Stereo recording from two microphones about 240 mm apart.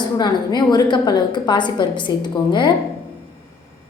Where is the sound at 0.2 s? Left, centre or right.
Centre.